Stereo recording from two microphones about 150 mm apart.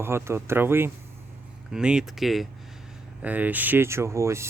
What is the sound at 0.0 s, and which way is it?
Speech, 15° right (ahead or behind).